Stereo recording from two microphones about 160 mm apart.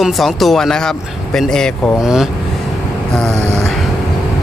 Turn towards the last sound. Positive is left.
turn(degrees=0)  # may be behind; listen again after turning